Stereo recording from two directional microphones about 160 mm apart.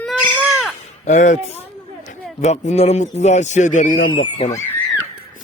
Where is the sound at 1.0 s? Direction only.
50° left (ahead or behind).